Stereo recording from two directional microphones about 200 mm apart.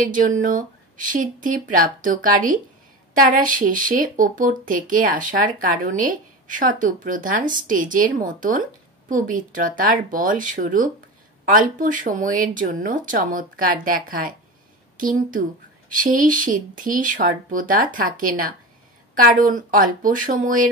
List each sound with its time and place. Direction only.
0.0 s speech: 40° right (ahead or behind)